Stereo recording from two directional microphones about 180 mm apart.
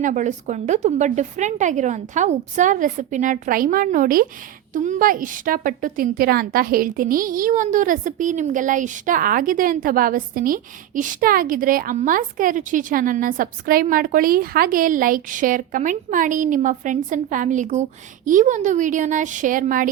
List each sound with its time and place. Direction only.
0.0 s a woman's voice: 45° right (ahead or behind)